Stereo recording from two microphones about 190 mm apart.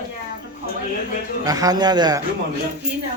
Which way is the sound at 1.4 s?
20° right (ahead or behind).